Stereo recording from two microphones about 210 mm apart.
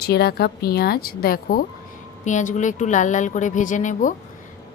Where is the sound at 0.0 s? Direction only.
50° left (ahead or behind).